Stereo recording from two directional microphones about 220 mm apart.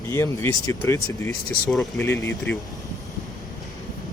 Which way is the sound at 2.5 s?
50° left (ahead or behind).